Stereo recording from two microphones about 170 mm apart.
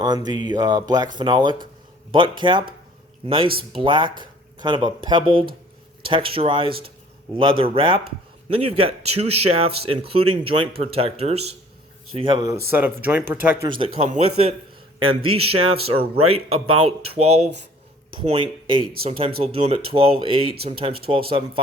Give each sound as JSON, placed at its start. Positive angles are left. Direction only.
{"t": 0.0, "sound": "speech", "side_deg": -25}
{"t": 12.7, "sound": "speech", "side_deg": -10}
{"t": 13.7, "sound": "speech", "side_deg": -30}